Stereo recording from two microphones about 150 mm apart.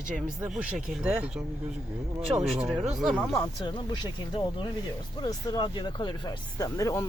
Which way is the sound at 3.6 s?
30° left (ahead or behind).